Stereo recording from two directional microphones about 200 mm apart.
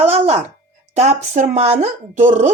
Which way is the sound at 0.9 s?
35° right (ahead or behind).